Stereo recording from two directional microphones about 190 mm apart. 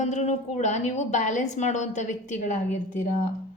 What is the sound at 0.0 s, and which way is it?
A woman's voice, 35° left (ahead or behind).